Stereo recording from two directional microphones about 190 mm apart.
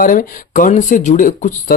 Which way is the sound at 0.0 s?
45° left (ahead or behind).